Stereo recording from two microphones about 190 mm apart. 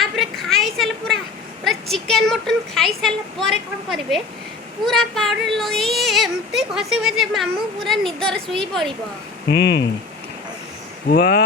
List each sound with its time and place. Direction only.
0.0 s children playing: centre (ahead or behind)
1.6 s a child's voice: centre (ahead or behind)
9.5 s speech: 60° left (ahead or behind)
11.1 s speech: 55° left (ahead or behind)